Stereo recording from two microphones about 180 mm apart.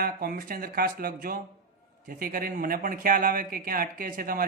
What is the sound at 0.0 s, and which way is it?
A man's voice, 55° right (ahead or behind).